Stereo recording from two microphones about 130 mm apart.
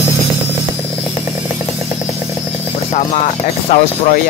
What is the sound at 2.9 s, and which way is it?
Speech, 65° left (ahead or behind).